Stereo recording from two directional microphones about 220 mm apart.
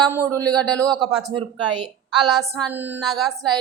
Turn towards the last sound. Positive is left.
turn(degrees=0)  # may be behind; listen again after turning